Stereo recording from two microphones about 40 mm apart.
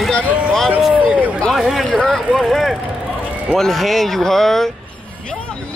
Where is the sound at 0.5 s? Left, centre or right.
Centre.